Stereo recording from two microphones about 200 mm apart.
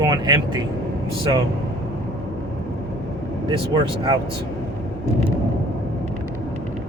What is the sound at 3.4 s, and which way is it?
Speech, 25° right (ahead or behind).